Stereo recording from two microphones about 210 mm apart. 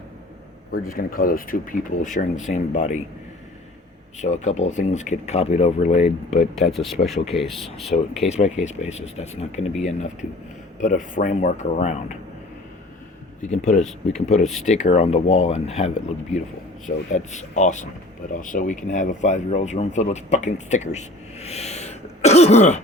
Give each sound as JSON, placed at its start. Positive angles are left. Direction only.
{"t": 0.7, "sound": "speech", "side_deg": 45}
{"t": 4.2, "sound": "speech", "side_deg": 35}
{"t": 6.4, "sound": "speech", "side_deg": 0}
{"t": 7.9, "sound": "speech", "side_deg": 35}
{"t": 13.4, "sound": "speech", "side_deg": 35}